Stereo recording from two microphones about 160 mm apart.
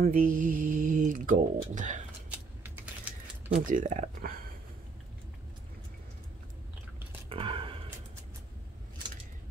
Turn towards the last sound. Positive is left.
turn(degrees=-35)  # may be behind; listen again after turning